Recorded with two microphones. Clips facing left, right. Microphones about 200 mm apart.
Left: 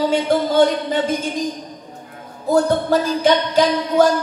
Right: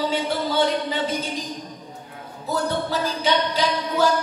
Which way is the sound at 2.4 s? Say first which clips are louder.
Left 8 dB; 50° left (ahead or behind).